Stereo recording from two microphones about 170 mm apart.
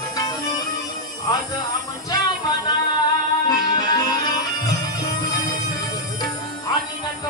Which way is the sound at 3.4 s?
25° left (ahead or behind).